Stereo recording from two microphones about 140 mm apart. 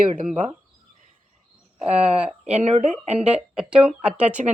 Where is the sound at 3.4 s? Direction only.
5° right (ahead or behind).